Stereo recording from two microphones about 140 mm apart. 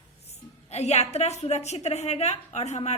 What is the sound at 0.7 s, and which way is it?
Speech, 50° left (ahead or behind).